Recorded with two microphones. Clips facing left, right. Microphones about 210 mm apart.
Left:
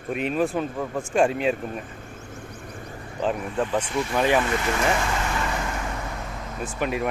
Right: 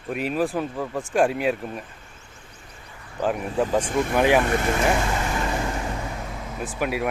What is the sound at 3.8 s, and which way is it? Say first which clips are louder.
Speech: right 3 dB; 50° right (ahead or behind).